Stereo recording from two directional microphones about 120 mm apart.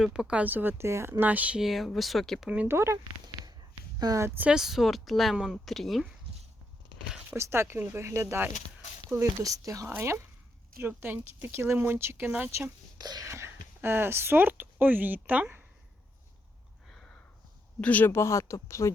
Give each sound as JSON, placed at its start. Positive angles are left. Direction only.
{"t": 0.0, "sound": "speech", "side_deg": -5}
{"t": 2.5, "sound": "speech", "side_deg": -15}
{"t": 7.3, "sound": "speech", "side_deg": -20}
{"t": 13.0, "sound": "speech", "side_deg": -35}
{"t": 17.7, "sound": "speech", "side_deg": 10}